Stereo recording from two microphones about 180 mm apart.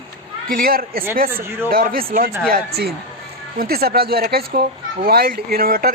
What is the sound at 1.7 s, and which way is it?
A man's voice, 55° right (ahead or behind).